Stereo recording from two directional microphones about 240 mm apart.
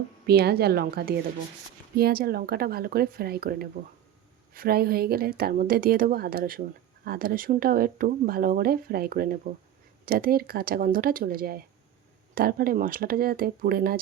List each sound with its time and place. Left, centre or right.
0.3 s speech: right